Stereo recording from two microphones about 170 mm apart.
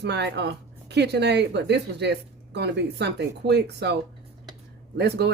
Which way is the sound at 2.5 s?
80° right.